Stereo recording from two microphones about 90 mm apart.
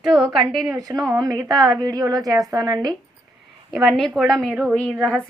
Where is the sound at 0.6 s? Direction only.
45° right (ahead or behind).